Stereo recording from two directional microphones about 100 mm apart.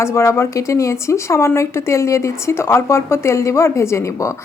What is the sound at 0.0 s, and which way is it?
Speech, 30° left (ahead or behind).